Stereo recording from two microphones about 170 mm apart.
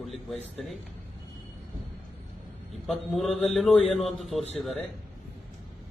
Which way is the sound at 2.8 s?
Centre (ahead or behind).